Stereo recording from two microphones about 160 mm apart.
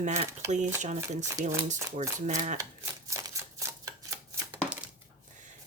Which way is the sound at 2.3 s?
45° right (ahead or behind).